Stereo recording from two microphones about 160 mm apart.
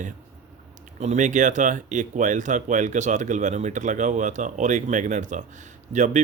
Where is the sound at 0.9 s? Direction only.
45° right (ahead or behind).